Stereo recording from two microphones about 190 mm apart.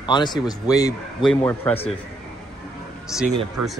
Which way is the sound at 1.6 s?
30° left (ahead or behind).